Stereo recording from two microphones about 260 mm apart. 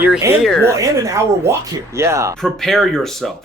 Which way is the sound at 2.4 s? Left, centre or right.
Centre.